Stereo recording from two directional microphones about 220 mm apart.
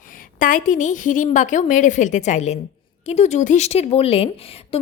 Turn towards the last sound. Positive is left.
turn(degrees=25)  # may be behind; listen again after turning